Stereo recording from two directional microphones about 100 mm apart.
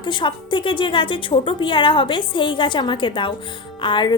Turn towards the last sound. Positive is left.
turn(degrees=55)  # may be behind; listen again after turning